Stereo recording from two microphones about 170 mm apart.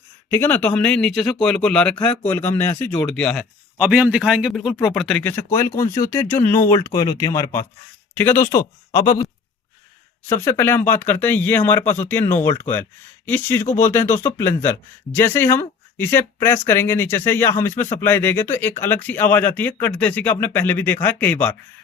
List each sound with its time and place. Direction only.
0.3 s speech: 10° left (ahead or behind)
3.8 s a man's voice: 10° right (ahead or behind); by 9.2 s 20° left (ahead or behind)
10.2 s speech: 15° left (ahead or behind)